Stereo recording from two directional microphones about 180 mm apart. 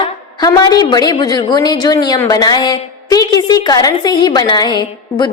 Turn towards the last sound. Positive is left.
turn(degrees=25)  # may be behind; listen again after turning